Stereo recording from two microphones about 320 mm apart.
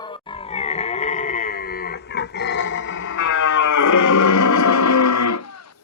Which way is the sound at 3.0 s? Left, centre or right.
Left.